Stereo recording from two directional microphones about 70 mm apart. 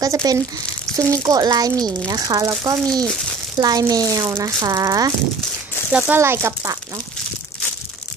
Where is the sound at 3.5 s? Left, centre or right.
Right.